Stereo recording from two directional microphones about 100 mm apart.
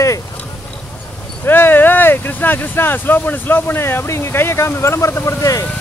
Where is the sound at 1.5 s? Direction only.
20° left (ahead or behind).